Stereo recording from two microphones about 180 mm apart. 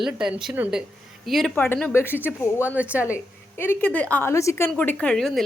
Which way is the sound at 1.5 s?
10° left (ahead or behind).